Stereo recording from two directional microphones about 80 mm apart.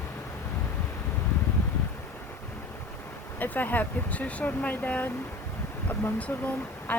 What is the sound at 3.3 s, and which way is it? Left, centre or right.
Speech, left.